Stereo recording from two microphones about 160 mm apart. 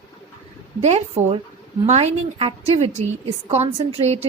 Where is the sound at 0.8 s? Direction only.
40° right (ahead or behind).